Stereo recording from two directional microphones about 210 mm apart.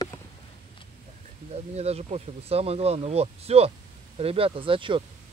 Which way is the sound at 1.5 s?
30° right (ahead or behind).